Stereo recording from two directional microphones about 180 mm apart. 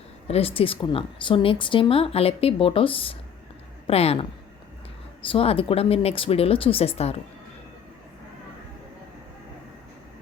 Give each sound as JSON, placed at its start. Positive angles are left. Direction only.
{"t": 0.3, "sound": "a woman's voice", "side_deg": 35}